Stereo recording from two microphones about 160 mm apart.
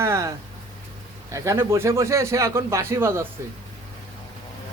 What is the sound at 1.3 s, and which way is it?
A man's voice, 20° right (ahead or behind).